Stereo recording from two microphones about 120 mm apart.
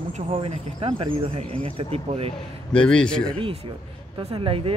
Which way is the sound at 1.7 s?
55° right (ahead or behind).